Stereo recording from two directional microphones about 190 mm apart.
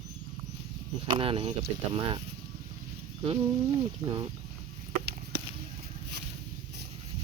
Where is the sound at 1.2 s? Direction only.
30° right (ahead or behind).